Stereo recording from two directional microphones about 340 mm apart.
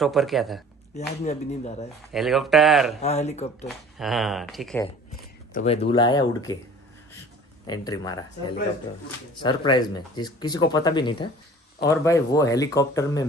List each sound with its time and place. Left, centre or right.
0.0 s speech: centre
0.9 s speech: centre
2.1 s speech: centre
3.0 s speech: centre
4.0 s speech: centre
5.5 s speech: centre
7.6 s speech: centre